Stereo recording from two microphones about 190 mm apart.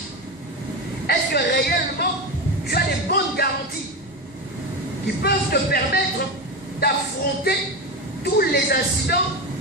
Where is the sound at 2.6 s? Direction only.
55° left (ahead or behind).